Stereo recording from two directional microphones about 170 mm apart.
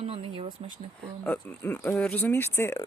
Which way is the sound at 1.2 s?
10° left (ahead or behind).